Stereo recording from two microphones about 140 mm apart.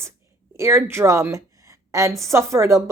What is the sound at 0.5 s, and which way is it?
A woman's voice, 20° right (ahead or behind).